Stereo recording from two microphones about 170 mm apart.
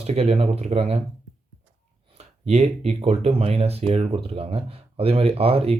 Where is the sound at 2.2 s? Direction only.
40° right (ahead or behind).